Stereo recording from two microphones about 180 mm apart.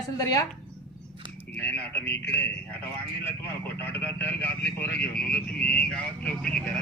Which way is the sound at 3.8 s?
10° left (ahead or behind).